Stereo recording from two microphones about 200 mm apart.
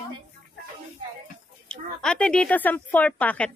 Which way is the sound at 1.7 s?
5° left (ahead or behind).